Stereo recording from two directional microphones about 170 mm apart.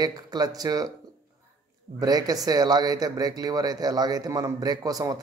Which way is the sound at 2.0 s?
20° right (ahead or behind).